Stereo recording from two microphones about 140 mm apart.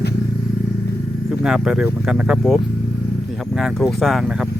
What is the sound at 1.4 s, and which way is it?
Speech, 5° right (ahead or behind).